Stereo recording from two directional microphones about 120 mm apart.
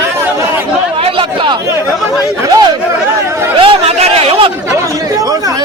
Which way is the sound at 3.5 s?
45° right (ahead or behind).